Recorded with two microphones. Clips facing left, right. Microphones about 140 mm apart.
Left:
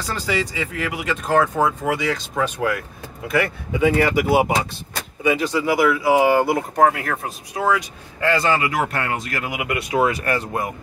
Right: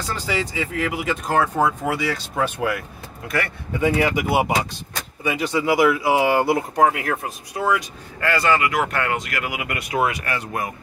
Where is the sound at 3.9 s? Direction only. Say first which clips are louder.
Left 2 dB; 10° right (ahead or behind).